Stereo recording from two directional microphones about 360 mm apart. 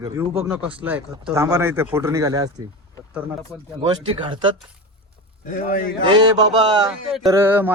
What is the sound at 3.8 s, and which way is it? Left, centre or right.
Speech, centre.